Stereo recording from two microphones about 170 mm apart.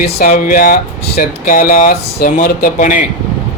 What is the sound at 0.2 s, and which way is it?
Speech, 55° left (ahead or behind).